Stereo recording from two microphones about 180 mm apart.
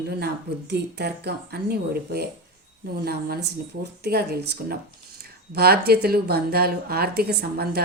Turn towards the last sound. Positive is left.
turn(degrees=-60)  # may be behind; listen again after turning